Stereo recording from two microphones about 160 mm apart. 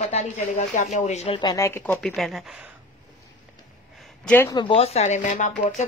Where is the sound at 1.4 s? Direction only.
25° left (ahead or behind).